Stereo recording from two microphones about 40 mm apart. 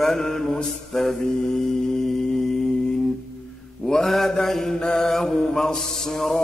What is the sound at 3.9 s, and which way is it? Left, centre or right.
Mantra, centre.